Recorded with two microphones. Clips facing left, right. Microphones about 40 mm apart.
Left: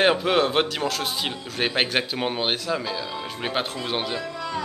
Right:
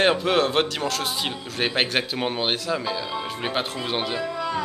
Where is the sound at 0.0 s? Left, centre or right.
Centre.